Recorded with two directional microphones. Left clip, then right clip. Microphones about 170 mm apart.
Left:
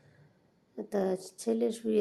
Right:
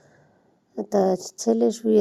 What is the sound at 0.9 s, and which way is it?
A woman's voice, 40° right (ahead or behind).